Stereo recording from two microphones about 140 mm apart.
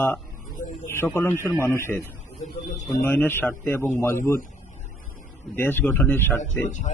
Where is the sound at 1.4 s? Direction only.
15° left (ahead or behind).